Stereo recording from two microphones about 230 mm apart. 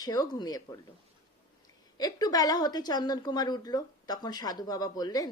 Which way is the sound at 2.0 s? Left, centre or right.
Centre.